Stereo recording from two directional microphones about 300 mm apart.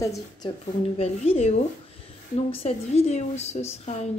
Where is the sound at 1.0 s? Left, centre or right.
Centre.